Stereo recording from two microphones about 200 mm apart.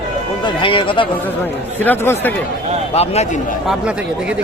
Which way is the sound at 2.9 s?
30° left (ahead or behind).